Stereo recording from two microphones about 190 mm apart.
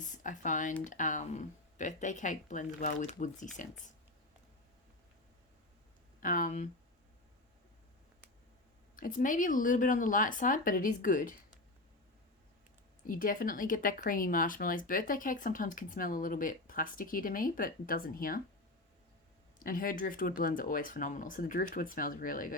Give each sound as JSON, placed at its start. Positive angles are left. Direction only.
{"t": 0.0, "sound": "speech", "side_deg": 40}
{"t": 6.1, "sound": "speech", "side_deg": 45}
{"t": 9.0, "sound": "speech", "side_deg": 45}
{"t": 13.1, "sound": "speech", "side_deg": 45}
{"t": 19.5, "sound": "speech", "side_deg": 50}